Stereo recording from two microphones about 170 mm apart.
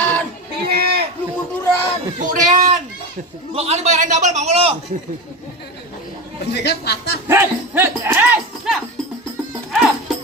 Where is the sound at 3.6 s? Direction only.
40° right (ahead or behind).